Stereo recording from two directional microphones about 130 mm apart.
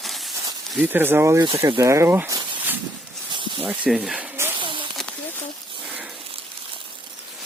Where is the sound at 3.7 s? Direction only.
5° right (ahead or behind).